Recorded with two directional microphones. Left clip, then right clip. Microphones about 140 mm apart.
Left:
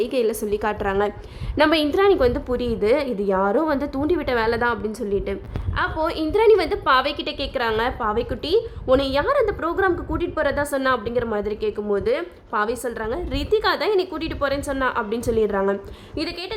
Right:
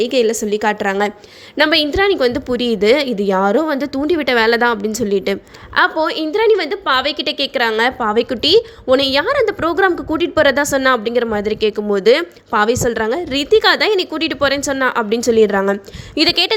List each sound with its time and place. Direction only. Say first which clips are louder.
0.0 s a woman's voice: right 7 dB; 20° right (ahead or behind)
6.0 s a woman's voice: right 4 dB; 20° right (ahead or behind)
13.3 s a woman's voice: right 8 dB; 20° right (ahead or behind); by 16.5 s 40° right (ahead or behind)